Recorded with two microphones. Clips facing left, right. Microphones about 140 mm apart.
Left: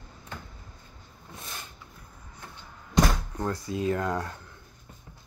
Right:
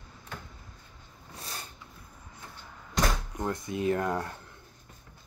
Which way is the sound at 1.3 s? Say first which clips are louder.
Even; 35° right (ahead or behind).